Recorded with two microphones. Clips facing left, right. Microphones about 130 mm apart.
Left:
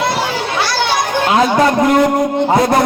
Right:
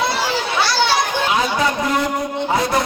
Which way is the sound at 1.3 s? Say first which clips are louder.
Left 10 dB; 50° left (ahead or behind).